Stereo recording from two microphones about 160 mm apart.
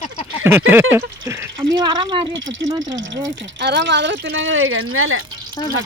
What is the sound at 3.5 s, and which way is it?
Speech, 90° right.